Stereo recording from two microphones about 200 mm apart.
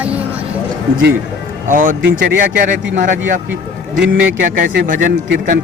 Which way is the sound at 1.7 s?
40° right (ahead or behind).